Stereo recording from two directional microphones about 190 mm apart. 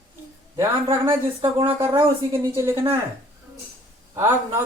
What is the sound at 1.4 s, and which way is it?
Speech, 25° right (ahead or behind).